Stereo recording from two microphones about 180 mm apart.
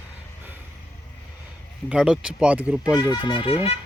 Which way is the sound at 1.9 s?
5° right (ahead or behind).